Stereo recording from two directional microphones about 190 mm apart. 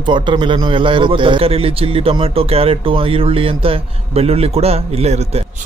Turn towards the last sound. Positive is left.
turn(degrees=-35)  # may be behind; listen again after turning